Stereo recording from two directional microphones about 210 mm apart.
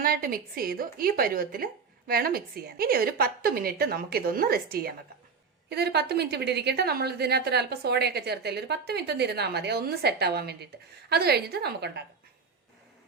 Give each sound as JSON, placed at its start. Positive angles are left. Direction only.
{"t": 0.0, "sound": "a woman's voice", "side_deg": -45}